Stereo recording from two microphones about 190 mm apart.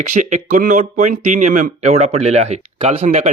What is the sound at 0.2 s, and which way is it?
Speech, 40° right (ahead or behind).